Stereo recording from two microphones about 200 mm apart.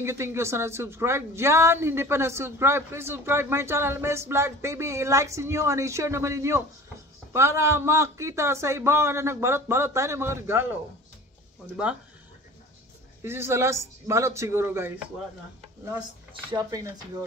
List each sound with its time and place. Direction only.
0.0 s a woman's voice: 15° right (ahead or behind)
11.7 s speech: 5° right (ahead or behind)
13.2 s a woman's voice: 10° right (ahead or behind)
16.4 s speech: 20° right (ahead or behind)